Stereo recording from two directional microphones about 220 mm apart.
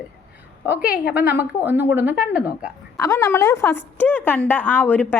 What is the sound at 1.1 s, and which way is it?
A woman's voice, 5° right (ahead or behind).